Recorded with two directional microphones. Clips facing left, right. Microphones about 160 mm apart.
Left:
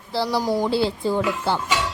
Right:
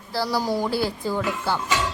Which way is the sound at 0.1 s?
20° left (ahead or behind).